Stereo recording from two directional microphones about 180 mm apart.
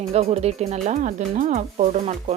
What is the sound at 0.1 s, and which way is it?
Speech, 35° right (ahead or behind).